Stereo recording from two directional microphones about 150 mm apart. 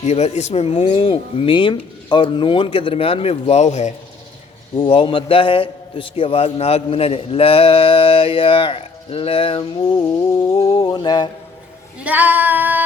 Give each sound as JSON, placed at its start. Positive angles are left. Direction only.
{"t": 0.0, "sound": "a man's voice", "side_deg": 50}
{"t": 4.8, "sound": "a man's voice", "side_deg": 35}
{"t": 10.7, "sound": "a sound", "side_deg": 30}
{"t": 11.9, "sound": "female singing", "side_deg": -10}